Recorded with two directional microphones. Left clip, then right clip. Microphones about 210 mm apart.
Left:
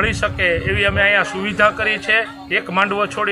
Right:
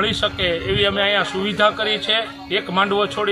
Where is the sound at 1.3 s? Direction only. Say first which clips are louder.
Left 2 dB; 40° right (ahead or behind).